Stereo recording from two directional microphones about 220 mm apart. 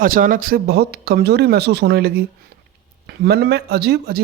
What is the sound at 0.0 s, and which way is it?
Speech, 40° right (ahead or behind).